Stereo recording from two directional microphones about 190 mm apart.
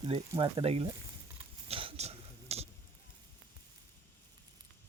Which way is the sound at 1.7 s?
30° right (ahead or behind).